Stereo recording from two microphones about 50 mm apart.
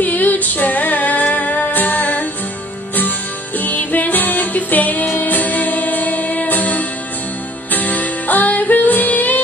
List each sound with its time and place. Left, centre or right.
0.0 s music: left
3.5 s music: left